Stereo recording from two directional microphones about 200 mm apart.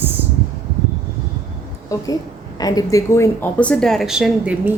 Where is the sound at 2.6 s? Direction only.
20° left (ahead or behind).